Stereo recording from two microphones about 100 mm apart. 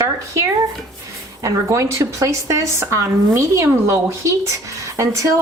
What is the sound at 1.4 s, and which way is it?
Speech, 30° right (ahead or behind).